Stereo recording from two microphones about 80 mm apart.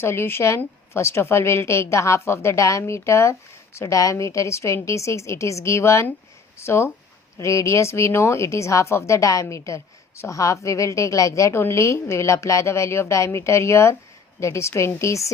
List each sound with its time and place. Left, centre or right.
0.0 s a woman's voice: left